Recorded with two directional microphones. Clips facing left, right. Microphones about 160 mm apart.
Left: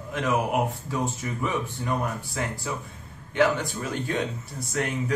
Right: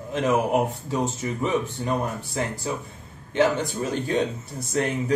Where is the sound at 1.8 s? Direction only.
30° right (ahead or behind).